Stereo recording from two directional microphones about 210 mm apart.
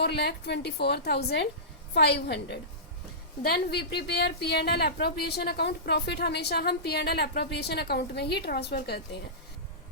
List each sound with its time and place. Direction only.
0.0 s a woman's voice: 50° left (ahead or behind)